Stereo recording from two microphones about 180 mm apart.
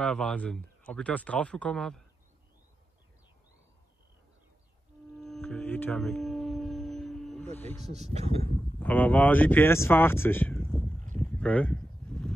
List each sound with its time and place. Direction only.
0.0 s speech: 5° left (ahead or behind)
5.1 s a sound: centre (ahead or behind)
7.5 s speech: 10° left (ahead or behind)
7.8 s speech: 35° right (ahead or behind)
8.7 s speech: 10° left (ahead or behind)
11.1 s a sound: 5° left (ahead or behind)